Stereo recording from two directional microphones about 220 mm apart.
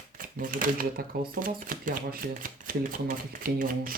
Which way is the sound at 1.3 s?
40° right (ahead or behind).